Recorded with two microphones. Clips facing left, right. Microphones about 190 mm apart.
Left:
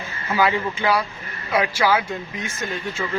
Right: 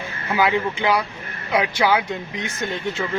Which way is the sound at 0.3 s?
15° right (ahead or behind).